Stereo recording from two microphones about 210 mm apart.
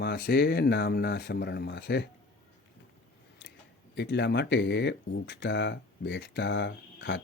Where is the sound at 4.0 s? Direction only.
55° left (ahead or behind).